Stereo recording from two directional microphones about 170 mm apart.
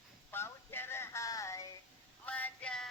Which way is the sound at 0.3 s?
15° left (ahead or behind).